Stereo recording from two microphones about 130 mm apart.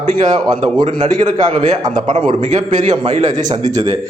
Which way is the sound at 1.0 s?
60° right (ahead or behind).